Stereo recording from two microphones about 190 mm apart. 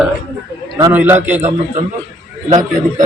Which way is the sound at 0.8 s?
10° right (ahead or behind).